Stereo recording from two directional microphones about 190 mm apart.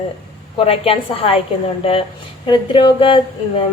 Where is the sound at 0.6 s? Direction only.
30° left (ahead or behind).